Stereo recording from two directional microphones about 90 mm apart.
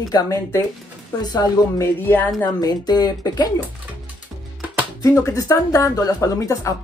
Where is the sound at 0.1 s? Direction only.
35° left (ahead or behind).